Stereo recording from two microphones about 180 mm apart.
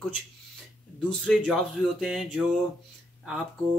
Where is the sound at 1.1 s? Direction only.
5° left (ahead or behind).